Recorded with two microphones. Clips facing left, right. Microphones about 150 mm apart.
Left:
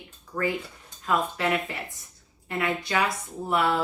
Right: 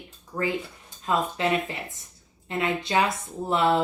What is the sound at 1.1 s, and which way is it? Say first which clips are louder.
Speech: right 1 dB; 25° right (ahead or behind).